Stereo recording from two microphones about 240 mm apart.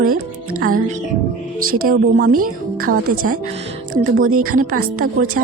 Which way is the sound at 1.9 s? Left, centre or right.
Right.